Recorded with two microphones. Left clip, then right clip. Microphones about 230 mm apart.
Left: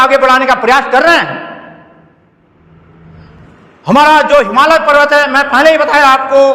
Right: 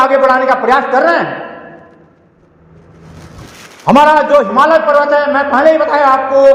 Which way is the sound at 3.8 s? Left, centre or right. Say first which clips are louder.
Left 1 dB; left.